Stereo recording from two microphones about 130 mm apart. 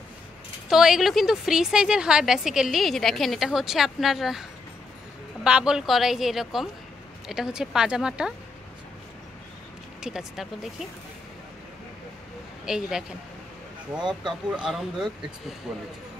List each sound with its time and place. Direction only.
0.7 s a woman's voice: 5° right (ahead or behind)
10.0 s a woman's voice: 5° right (ahead or behind)
12.6 s a woman's voice: 5° right (ahead or behind)
14.0 s a woman's voice: 5° right (ahead or behind)